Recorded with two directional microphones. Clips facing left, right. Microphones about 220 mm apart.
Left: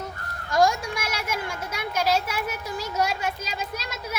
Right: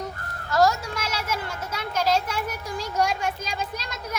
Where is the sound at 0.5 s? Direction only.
15° left (ahead or behind).